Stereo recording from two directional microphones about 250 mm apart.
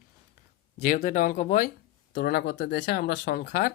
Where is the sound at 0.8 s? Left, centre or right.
Left.